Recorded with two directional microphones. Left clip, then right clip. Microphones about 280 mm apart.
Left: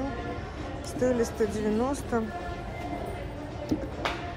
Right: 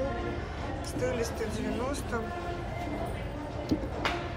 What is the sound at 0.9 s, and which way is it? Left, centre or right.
Speech, centre.